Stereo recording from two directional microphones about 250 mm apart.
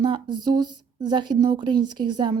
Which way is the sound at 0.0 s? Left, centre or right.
Centre.